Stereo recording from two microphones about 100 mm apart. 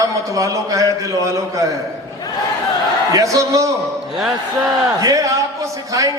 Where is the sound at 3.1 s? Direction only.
35° right (ahead or behind).